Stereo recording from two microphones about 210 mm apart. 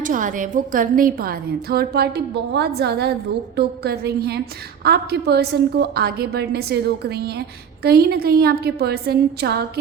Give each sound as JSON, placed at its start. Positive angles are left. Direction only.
{"t": 0.0, "sound": "a woman's voice", "side_deg": -40}